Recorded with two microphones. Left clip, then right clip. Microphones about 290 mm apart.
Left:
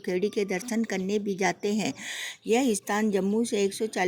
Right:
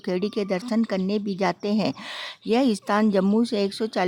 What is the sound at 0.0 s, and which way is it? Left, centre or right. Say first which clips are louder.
A woman's voice: right 1 dB; centre.